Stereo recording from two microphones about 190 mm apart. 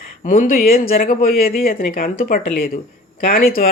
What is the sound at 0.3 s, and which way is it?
Speech, 45° left (ahead or behind).